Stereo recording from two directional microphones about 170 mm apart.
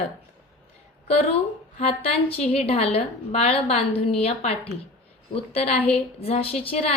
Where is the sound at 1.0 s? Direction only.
35° left (ahead or behind).